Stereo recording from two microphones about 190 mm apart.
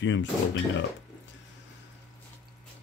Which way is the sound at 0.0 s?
75° left (ahead or behind).